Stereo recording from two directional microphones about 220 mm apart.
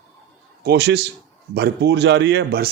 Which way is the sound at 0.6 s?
50° right (ahead or behind).